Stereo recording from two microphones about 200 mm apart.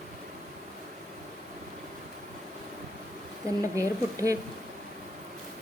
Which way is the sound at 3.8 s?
15° right (ahead or behind).